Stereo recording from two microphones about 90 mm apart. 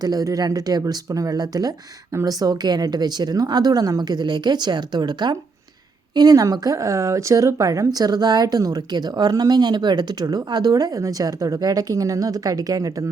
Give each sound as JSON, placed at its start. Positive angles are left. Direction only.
{"t": 0.0, "sound": "speech", "side_deg": -45}